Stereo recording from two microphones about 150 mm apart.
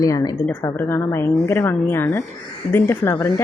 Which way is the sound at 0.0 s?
25° left (ahead or behind).